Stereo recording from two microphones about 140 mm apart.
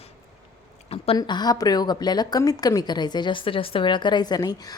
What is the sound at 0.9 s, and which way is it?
A woman's voice, 40° left (ahead or behind).